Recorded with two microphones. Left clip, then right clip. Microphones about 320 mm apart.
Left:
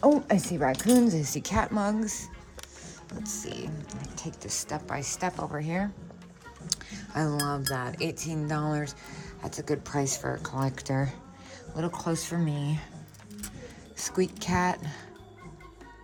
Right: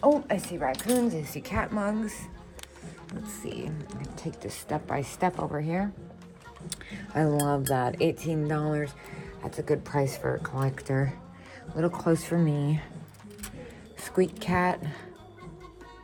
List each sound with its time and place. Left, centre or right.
0.0 s speech: left; by 2.2 s centre
4.1 s speech: centre
4.5 s speech: centre
14.0 s speech: centre